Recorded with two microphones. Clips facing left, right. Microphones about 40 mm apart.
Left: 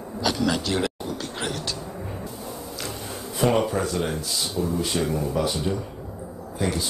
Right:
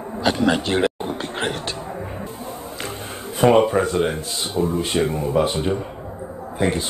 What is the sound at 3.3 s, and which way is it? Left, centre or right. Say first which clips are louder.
Speech: right 7 dB; right.